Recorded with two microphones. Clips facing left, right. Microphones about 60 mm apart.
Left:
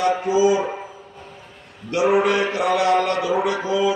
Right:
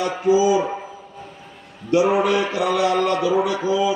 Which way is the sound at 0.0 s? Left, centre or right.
Left.